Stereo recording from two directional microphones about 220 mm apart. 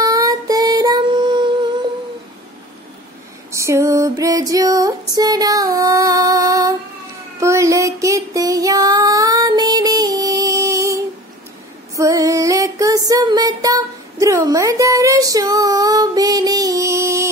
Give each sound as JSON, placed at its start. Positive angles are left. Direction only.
{"t": 0.0, "sound": "music", "side_deg": -15}
{"t": 3.5, "sound": "female singing", "side_deg": -15}
{"t": 7.3, "sound": "a sound", "side_deg": -15}
{"t": 11.9, "sound": "music", "side_deg": -15}